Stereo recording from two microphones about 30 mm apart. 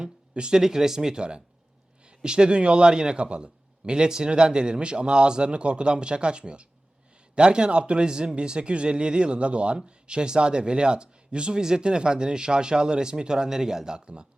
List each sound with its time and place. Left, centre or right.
0.0 s a sound: right
0.5 s a man's voice: centre
13.9 s a man's voice: right